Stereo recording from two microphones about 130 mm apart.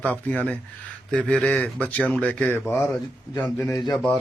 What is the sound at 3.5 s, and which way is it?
Speech, 25° left (ahead or behind).